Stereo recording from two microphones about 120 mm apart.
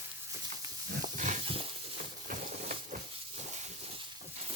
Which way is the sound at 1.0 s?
90° right.